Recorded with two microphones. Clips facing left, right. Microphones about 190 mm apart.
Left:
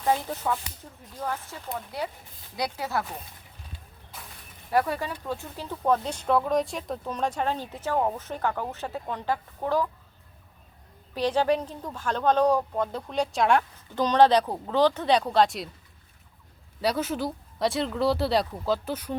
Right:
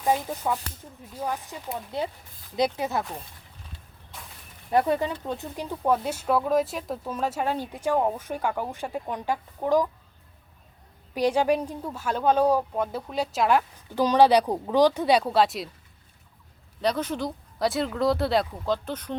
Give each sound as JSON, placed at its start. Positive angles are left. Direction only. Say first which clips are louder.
{"t": 0.0, "sound": "speech", "louder": "right 1 dB", "side_deg": -10}
{"t": 4.7, "sound": "speech", "louder": "right 3 dB", "side_deg": -20}
{"t": 11.1, "sound": "speech", "louder": "right 2 dB", "side_deg": -10}
{"t": 16.8, "sound": "speech", "louder": "even", "side_deg": 5}